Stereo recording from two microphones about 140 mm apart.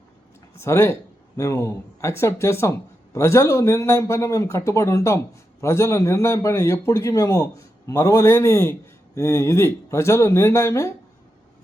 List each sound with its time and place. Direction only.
0.6 s a man's voice: 20° left (ahead or behind)